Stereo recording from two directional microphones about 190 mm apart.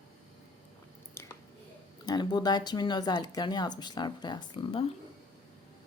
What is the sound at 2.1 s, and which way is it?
Speech, 20° left (ahead or behind).